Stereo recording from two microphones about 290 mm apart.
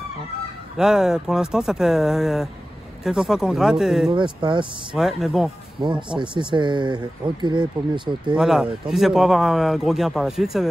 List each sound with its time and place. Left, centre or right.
0.7 s speech: centre
4.1 s speech: centre
4.9 s speech: centre
6.0 s speech: centre
8.4 s speech: centre